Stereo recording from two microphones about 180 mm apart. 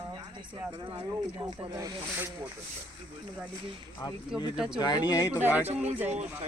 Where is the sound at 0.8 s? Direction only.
25° right (ahead or behind).